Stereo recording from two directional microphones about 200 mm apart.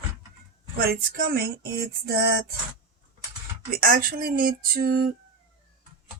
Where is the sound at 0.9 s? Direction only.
50° right (ahead or behind).